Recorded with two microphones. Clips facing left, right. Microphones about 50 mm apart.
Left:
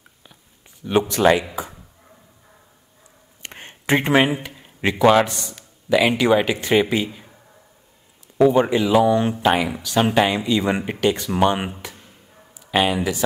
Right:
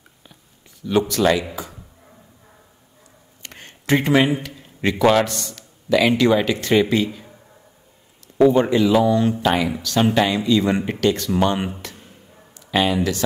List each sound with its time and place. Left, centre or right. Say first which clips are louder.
0.8 s speech: left 1 dB; left
3.4 s a sound: even; left
5.0 s a man's voice: left 2 dB; centre
8.4 s a man's voice: right 1 dB; centre